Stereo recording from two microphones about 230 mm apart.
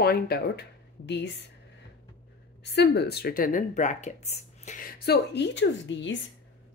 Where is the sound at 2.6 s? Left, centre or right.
Left.